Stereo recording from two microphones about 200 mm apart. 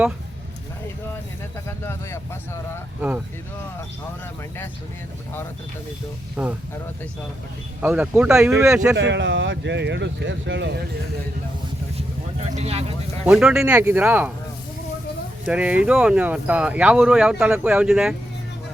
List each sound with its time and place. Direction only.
1.6 s speech: 15° left (ahead or behind)
6.4 s speech: 5° right (ahead or behind)
7.8 s speech: 5° right (ahead or behind)
9.0 s speech: 60° right (ahead or behind)
12.5 s speech: 30° right (ahead or behind)
13.2 s speech: 5° right (ahead or behind)
15.4 s speech: 5° right (ahead or behind)